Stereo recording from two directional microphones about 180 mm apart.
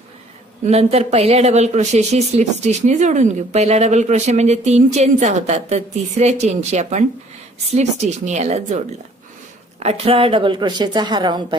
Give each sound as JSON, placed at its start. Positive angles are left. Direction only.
{"t": 0.7, "sound": "speech", "side_deg": -35}
{"t": 8.3, "sound": "a woman's voice", "side_deg": -40}